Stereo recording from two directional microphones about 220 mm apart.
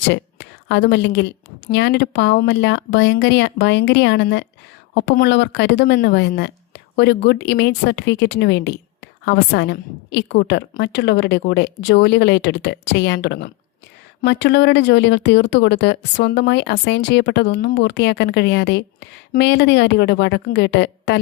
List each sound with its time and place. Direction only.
0.1 s a woman's voice: 55° left (ahead or behind)